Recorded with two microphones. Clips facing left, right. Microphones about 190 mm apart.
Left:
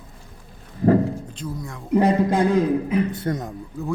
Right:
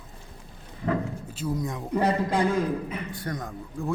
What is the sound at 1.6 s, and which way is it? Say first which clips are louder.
Speech: right 4 dB; 20° right (ahead or behind).